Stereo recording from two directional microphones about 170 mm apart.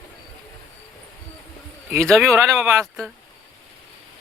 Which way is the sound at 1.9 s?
Centre (ahead or behind).